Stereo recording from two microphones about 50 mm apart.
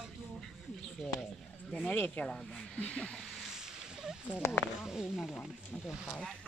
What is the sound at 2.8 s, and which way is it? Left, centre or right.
Speech, left.